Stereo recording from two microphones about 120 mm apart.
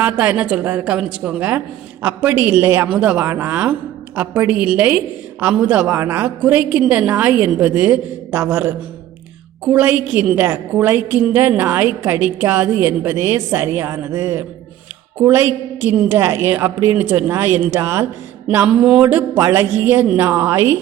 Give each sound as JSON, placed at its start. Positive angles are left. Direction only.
{"t": 0.0, "sound": "a woman's voice", "side_deg": -15}
{"t": 18.5, "sound": "a woman's voice", "side_deg": -10}
{"t": 19.4, "sound": "a woman's voice", "side_deg": -20}